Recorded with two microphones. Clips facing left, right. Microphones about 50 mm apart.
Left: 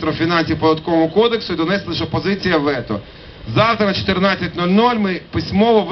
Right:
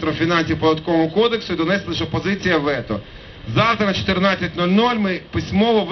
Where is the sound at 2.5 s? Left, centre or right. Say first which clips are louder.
Left 2 dB; centre.